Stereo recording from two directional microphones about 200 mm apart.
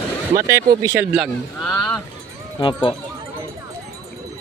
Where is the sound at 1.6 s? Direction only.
5° left (ahead or behind).